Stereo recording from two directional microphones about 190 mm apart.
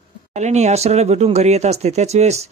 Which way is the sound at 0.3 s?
35° right (ahead or behind).